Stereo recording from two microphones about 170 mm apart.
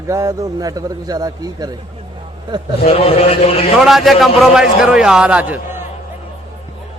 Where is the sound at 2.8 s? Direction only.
35° left (ahead or behind).